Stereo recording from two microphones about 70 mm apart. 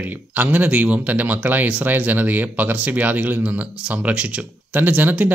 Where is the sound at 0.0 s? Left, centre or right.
Right.